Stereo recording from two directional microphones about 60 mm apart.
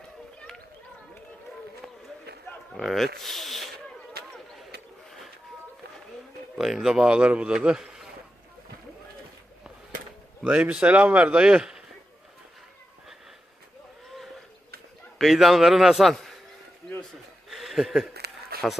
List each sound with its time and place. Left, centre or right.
2.7 s speech: centre
6.6 s a man's voice: centre
10.4 s a man's voice: right
15.2 s a man's voice: centre
17.5 s chuckle: centre